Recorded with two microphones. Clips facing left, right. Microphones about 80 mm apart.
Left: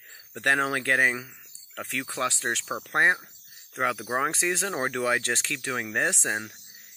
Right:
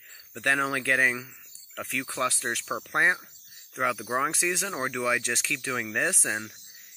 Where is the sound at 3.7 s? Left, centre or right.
Left.